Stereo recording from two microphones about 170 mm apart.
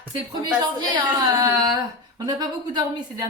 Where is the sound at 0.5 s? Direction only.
25° right (ahead or behind).